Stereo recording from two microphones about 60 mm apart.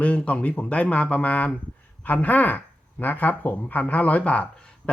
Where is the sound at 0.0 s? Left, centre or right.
Left.